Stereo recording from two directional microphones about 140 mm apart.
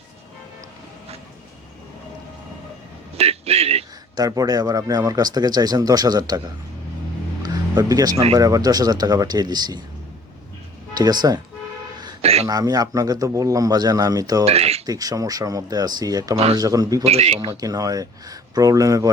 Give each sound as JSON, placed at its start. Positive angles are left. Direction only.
{"t": 3.2, "sound": "a sound", "side_deg": -50}
{"t": 4.2, "sound": "speech", "side_deg": -25}
{"t": 7.4, "sound": "music", "side_deg": -25}
{"t": 8.4, "sound": "speech", "side_deg": -25}
{"t": 10.9, "sound": "speech", "side_deg": -30}
{"t": 12.2, "sound": "a sound", "side_deg": -45}
{"t": 12.5, "sound": "speech", "side_deg": -25}
{"t": 14.4, "sound": "a sound", "side_deg": -45}
{"t": 14.8, "sound": "speech", "side_deg": -25}
{"t": 17.0, "sound": "speech", "side_deg": -50}
{"t": 17.6, "sound": "speech", "side_deg": -25}